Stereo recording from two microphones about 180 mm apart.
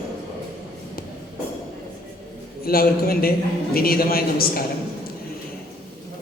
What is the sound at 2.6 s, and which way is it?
A man's voice, 55° left (ahead or behind).